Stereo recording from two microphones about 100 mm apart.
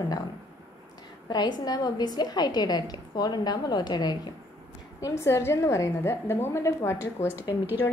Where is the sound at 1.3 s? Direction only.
45° left (ahead or behind).